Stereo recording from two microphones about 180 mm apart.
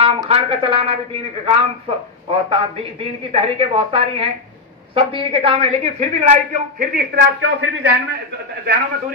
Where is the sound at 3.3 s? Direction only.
30° right (ahead or behind).